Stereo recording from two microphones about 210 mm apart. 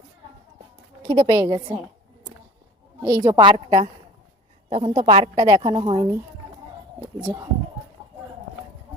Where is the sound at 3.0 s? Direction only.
15° right (ahead or behind).